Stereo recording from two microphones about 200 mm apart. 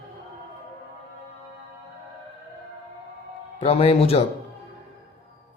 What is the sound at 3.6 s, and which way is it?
Speech, 30° left (ahead or behind).